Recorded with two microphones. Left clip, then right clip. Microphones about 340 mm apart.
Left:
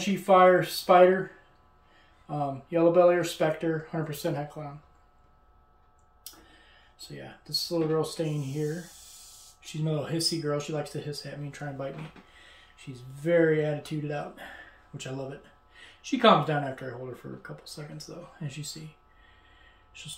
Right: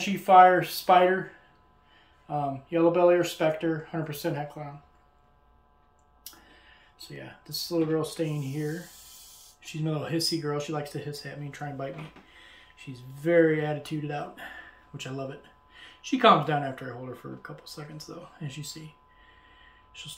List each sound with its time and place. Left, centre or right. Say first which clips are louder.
0.2 s speech: right 3 dB; centre
2.3 s speech: right 1 dB; centre
7.4 s speech: even; centre
12.7 s speech: right 1 dB; centre
19.9 s speech: right 2 dB; centre